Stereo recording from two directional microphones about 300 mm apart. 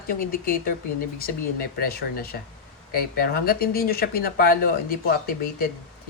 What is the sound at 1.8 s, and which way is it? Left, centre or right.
Speech, left.